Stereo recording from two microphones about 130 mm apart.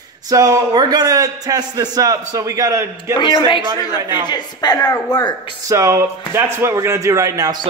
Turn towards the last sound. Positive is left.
turn(degrees=-30)  # may be behind; listen again after turning